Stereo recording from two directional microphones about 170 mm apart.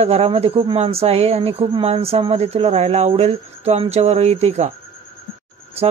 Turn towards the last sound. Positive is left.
turn(degrees=-35)  # may be behind; listen again after turning